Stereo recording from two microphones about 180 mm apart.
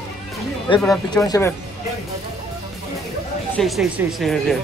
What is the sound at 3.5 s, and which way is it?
Speech, centre (ahead or behind).